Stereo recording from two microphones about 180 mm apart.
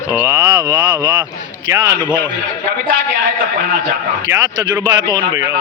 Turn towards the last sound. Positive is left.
turn(degrees=-25)  # may be behind; listen again after turning